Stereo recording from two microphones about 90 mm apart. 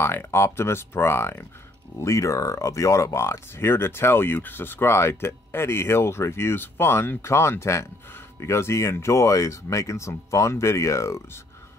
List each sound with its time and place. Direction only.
0.0 s speech: 30° left (ahead or behind)